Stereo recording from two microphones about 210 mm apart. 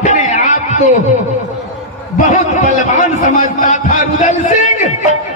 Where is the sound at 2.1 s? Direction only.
35° left (ahead or behind).